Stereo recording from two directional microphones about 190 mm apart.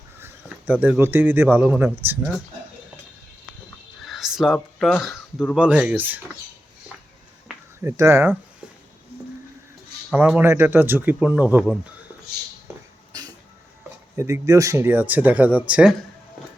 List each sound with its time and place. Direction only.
0.2 s speech: 10° right (ahead or behind)
4.0 s speech: centre (ahead or behind)
7.9 s speech: 15° right (ahead or behind)
10.1 s speech: 5° right (ahead or behind)
13.1 s a sound: 20° right (ahead or behind)
14.2 s speech: 15° right (ahead or behind)